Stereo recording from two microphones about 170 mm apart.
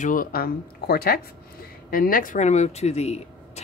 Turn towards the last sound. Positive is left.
turn(degrees=40)  # may be behind; listen again after turning